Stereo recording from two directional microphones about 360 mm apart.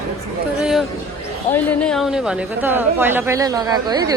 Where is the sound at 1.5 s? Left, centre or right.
Centre.